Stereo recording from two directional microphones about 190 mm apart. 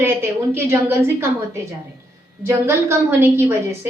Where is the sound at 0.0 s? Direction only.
10° right (ahead or behind).